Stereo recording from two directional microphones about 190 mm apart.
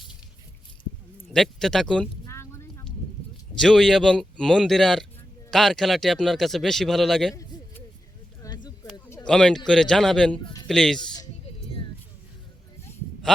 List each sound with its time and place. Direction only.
1.3 s speech: centre (ahead or behind)
2.2 s a sound: 15° left (ahead or behind)
3.5 s speech: centre (ahead or behind)
7.3 s hoot: 15° left (ahead or behind)
8.4 s a sound: 20° left (ahead or behind)
9.2 s speech: 5° left (ahead or behind)
10.4 s music: 20° left (ahead or behind)
10.7 s speech: centre (ahead or behind)